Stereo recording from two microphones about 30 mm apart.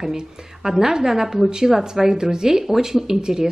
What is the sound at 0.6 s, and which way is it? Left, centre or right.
A woman's voice, centre.